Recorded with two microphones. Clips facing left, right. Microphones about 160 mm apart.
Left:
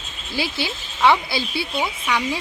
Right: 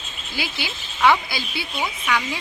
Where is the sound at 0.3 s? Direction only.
30° left (ahead or behind).